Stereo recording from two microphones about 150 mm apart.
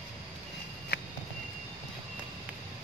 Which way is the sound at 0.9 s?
90° left.